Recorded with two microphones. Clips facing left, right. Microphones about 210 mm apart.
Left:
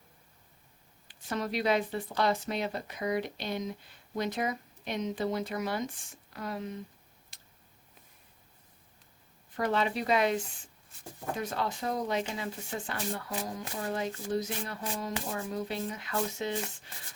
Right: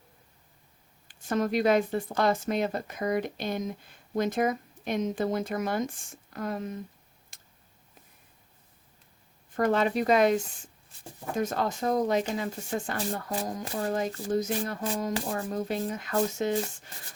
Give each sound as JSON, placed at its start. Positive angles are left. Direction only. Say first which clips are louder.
{"t": 1.0, "sound": "speech", "louder": "right 6 dB", "side_deg": -50}
{"t": 7.3, "sound": "a sound", "louder": "right 3 dB", "side_deg": -50}
{"t": 9.6, "sound": "speech", "louder": "right 5 dB", "side_deg": -50}